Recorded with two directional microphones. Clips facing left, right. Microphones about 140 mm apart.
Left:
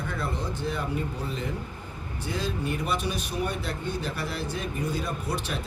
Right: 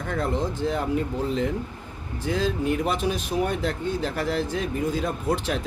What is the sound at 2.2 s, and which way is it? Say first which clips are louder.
Speech: right 6 dB; 90° right.